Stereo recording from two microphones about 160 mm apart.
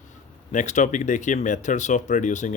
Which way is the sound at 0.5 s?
50° left (ahead or behind).